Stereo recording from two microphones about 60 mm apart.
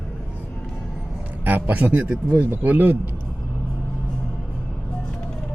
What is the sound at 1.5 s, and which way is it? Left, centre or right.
Speech, right.